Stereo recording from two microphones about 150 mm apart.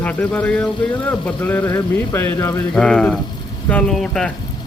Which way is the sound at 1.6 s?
30° left (ahead or behind).